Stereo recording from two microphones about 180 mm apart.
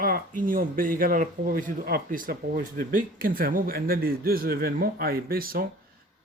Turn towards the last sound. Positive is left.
turn(degrees=-55)  # may be behind; listen again after turning